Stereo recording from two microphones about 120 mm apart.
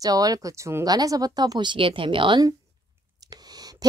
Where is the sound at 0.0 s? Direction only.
30° right (ahead or behind).